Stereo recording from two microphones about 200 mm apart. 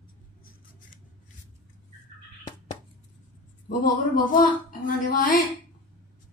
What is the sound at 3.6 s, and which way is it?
Speech, 45° left (ahead or behind).